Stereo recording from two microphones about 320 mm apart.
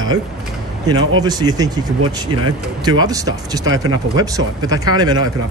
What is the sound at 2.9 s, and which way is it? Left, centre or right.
Speech, centre.